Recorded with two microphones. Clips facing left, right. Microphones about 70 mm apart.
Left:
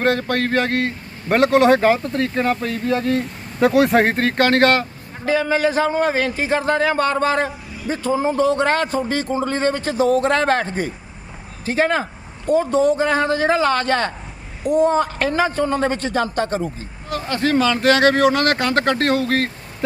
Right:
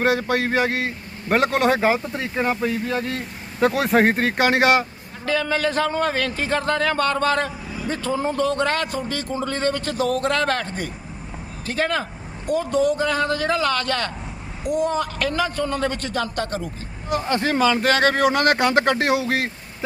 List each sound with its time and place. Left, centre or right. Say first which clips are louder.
0.0 s speech: left 1 dB; centre
5.2 s a man's voice: left 4 dB; centre
17.1 s speech: left 1 dB; right